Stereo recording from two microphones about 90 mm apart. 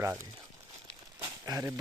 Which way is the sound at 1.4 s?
45° right (ahead or behind).